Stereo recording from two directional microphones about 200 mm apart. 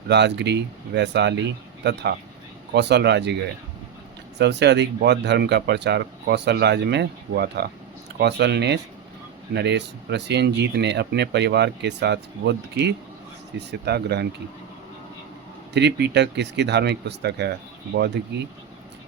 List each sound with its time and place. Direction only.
0.1 s speech: 60° right (ahead or behind)
4.4 s speech: 60° right (ahead or behind)
15.7 s speech: 60° right (ahead or behind)